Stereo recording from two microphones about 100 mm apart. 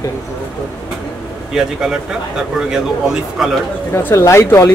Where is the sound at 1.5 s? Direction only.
5° right (ahead or behind).